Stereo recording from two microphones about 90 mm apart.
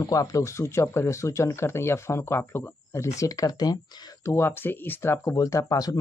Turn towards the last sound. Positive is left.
turn(degrees=40)  # may be behind; listen again after turning